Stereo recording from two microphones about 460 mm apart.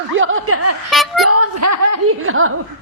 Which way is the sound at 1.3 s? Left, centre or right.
Right.